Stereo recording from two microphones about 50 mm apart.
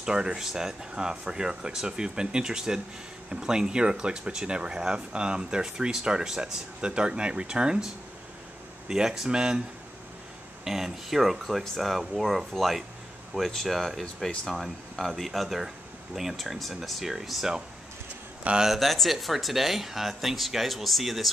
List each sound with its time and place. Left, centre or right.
0.0 s speech: centre
10.6 s speech: centre
18.4 s speech: right
18.8 s speech: centre